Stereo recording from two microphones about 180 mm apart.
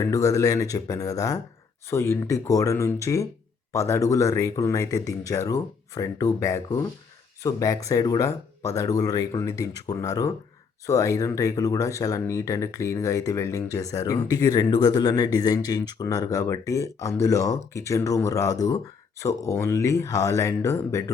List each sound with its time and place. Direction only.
0.0 s speech: 15° left (ahead or behind)